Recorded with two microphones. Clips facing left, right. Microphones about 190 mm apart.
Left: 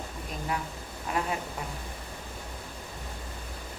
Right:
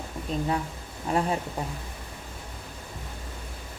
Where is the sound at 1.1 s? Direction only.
30° right (ahead or behind).